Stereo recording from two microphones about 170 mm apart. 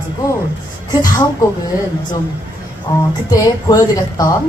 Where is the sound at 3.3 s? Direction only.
20° left (ahead or behind).